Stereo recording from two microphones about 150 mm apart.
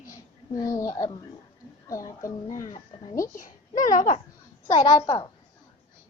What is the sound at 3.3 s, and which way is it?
Speech, 60° left (ahead or behind).